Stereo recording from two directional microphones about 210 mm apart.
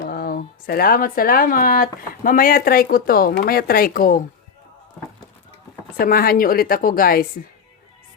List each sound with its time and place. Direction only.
0.0 s speech: 45° left (ahead or behind)
6.0 s speech: 45° left (ahead or behind)